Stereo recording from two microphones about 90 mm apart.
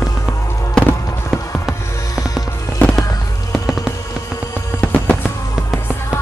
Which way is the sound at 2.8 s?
20° left (ahead or behind).